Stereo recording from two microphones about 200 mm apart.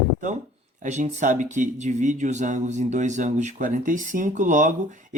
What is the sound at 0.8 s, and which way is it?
Speech, 40° right (ahead or behind).